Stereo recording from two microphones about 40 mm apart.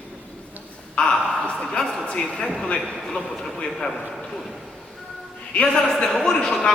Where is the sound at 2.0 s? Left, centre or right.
Left.